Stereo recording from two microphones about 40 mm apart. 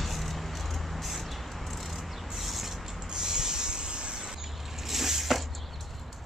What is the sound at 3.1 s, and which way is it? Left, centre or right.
Mechanisms, centre.